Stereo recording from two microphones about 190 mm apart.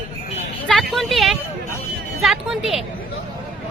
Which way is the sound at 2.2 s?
Centre (ahead or behind).